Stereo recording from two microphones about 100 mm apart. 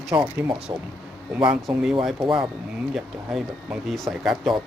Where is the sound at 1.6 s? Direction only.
5° right (ahead or behind).